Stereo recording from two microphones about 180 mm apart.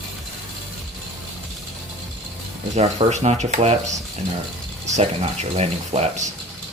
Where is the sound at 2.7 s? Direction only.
40° right (ahead or behind).